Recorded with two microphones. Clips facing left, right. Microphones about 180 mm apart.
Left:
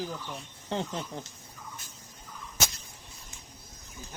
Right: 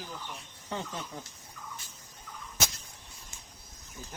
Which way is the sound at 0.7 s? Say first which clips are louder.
Left 4 dB; 30° left (ahead or behind).